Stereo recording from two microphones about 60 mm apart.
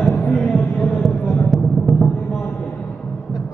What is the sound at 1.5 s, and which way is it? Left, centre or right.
Music, centre.